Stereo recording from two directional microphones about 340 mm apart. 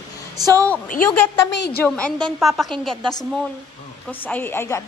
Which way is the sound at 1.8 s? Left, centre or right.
Centre.